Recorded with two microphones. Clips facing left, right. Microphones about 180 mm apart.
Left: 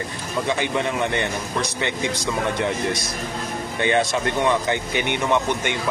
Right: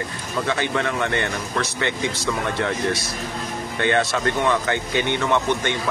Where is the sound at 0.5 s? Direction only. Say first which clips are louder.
Even; 15° left (ahead or behind).